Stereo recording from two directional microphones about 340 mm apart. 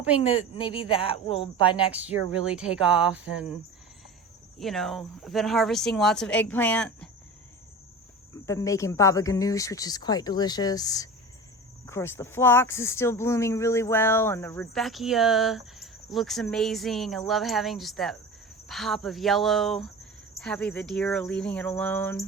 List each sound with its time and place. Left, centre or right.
0.2 s speech: centre
1.9 s speech: centre
8.4 s speech: centre